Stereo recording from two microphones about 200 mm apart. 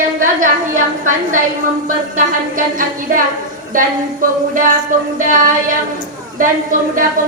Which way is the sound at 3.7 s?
45° right (ahead or behind).